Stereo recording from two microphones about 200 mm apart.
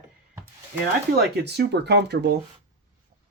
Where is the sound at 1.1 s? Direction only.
55° right (ahead or behind).